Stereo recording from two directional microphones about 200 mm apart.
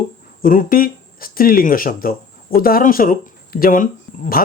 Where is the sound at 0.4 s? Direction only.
45° left (ahead or behind).